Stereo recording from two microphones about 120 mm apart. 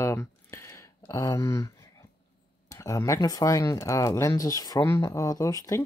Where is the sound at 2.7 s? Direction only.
25° left (ahead or behind).